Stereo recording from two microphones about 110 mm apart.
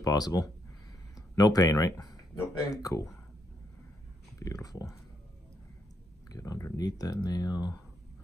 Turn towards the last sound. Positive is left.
turn(degrees=40)  # may be behind; listen again after turning